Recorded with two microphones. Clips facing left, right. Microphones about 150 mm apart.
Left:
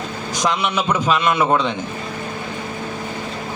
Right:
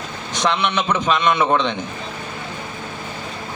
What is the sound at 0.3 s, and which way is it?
A man's voice, 10° left (ahead or behind).